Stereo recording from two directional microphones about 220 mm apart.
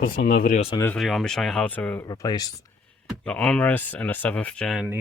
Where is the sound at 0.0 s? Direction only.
40° left (ahead or behind).